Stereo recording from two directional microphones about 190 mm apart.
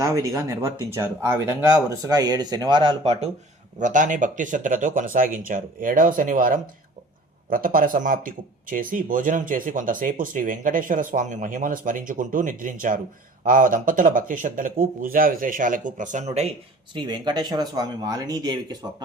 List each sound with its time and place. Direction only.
0.0 s speech: 15° right (ahead or behind); by 16.5 s 35° right (ahead or behind)
16.9 s speech: 25° right (ahead or behind)